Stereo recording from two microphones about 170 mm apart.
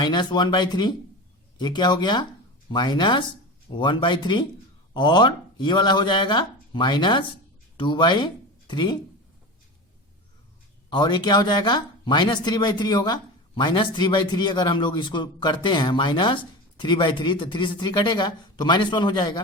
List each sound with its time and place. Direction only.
0.0 s a man's voice: 25° left (ahead or behind)
10.8 s a man's voice: 25° left (ahead or behind)